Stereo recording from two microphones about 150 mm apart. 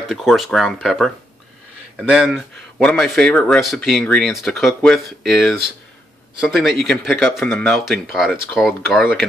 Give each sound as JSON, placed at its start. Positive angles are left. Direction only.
{"t": 0.1, "sound": "speech", "side_deg": 0}